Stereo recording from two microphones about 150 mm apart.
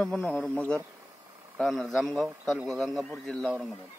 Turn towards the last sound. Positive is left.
turn(degrees=5)  # may be behind; listen again after turning